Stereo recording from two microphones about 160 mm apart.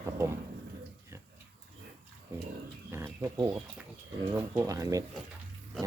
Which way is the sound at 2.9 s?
15° right (ahead or behind).